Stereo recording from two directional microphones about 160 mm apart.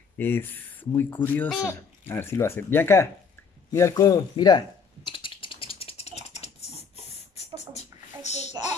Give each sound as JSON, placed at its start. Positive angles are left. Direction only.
{"t": 0.2, "sound": "speech", "side_deg": 10}
{"t": 3.7, "sound": "typing", "side_deg": 20}
{"t": 7.1, "sound": "a sound", "side_deg": 40}